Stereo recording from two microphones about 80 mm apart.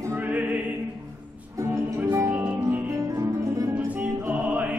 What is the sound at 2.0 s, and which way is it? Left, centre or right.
Music, right.